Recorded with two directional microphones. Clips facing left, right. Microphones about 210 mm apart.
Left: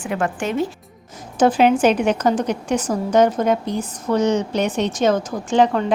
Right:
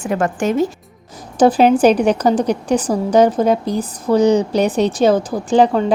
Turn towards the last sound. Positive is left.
turn(degrees=-35)  # may be behind; listen again after turning